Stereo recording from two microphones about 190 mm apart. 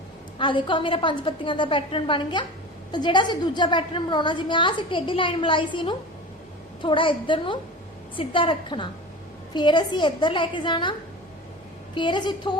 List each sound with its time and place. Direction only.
0.3 s a woman's voice: 25° left (ahead or behind)
11.9 s a woman's voice: 25° left (ahead or behind)